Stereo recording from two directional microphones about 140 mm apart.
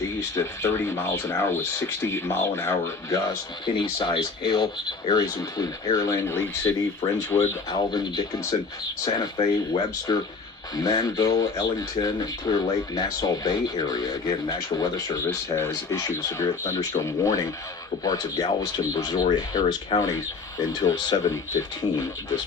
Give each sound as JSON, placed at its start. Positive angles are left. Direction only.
{"t": 0.2, "sound": "speech", "side_deg": 20}
{"t": 4.0, "sound": "speech", "side_deg": 35}
{"t": 7.9, "sound": "speech", "side_deg": 30}